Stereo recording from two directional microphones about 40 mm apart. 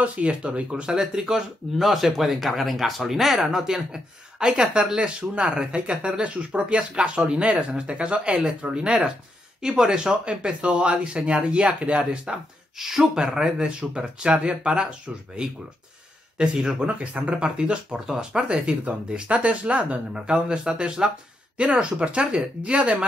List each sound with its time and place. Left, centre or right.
0.0 s speech: right; by 10.1 s centre
10.2 s speech: right
12.7 s speech: centre
16.8 s speech: right
17.6 s speech: right